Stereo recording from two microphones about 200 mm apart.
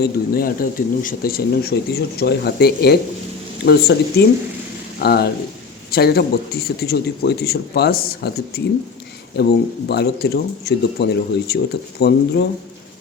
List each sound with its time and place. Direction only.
0.0 s speech: 45° left (ahead or behind)